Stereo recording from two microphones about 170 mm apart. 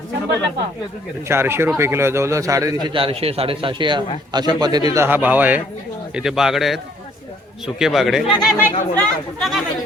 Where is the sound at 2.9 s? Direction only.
35° right (ahead or behind); by 9.6 s centre (ahead or behind).